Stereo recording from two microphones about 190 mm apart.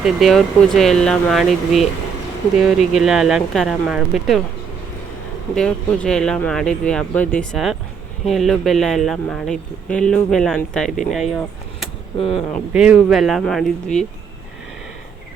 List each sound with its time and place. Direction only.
0.0 s speech: centre (ahead or behind)
5.5 s speech: 5° left (ahead or behind)